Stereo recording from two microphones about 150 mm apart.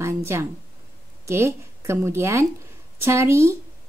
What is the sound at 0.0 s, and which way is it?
A woman's voice, 15° right (ahead or behind).